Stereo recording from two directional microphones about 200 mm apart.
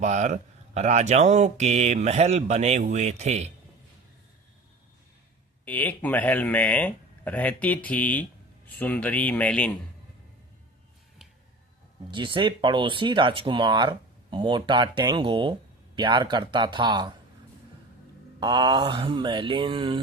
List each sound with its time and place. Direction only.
0.0 s speech: 35° right (ahead or behind)
5.6 s speech: 10° left (ahead or behind)
12.1 s speech: 25° right (ahead or behind)
18.3 s speech: 20° right (ahead or behind)